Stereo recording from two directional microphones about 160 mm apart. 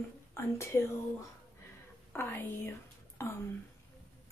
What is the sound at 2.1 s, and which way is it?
A woman's voice, 10° left (ahead or behind).